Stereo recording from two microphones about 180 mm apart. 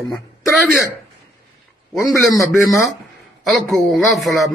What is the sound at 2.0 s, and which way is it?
Speech, 15° left (ahead or behind).